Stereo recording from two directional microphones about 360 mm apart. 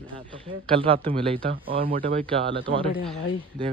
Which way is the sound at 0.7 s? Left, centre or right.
Centre.